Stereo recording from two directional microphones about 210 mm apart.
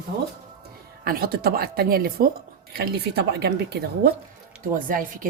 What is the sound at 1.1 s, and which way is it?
A woman's voice, 45° right (ahead or behind).